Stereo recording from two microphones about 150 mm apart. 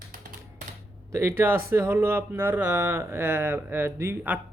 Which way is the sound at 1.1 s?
15° right (ahead or behind).